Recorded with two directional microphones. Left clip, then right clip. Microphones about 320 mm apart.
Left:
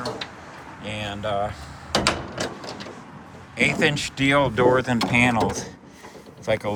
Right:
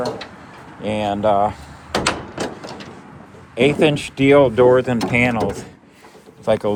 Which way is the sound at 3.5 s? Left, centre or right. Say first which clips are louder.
Right 5 dB; centre.